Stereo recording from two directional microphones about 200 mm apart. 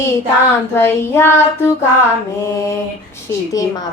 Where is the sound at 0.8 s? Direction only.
10° left (ahead or behind).